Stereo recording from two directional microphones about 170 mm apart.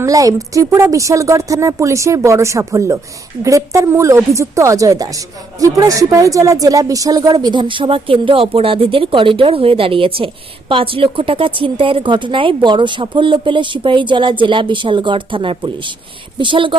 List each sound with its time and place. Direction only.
0.0 s a woman's voice: 20° right (ahead or behind)